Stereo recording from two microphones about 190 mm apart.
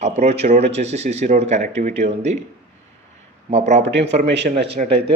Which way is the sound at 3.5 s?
35° right (ahead or behind).